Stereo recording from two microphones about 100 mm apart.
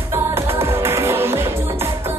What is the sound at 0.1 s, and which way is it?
Music, 25° right (ahead or behind).